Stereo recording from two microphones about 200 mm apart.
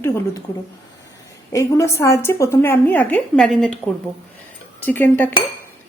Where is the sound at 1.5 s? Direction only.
15° left (ahead or behind).